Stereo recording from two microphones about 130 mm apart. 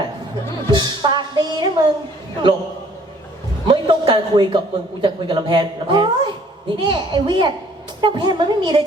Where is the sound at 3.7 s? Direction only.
35° right (ahead or behind).